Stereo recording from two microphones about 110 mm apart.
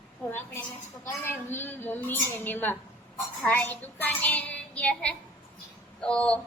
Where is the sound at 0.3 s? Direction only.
20° left (ahead or behind).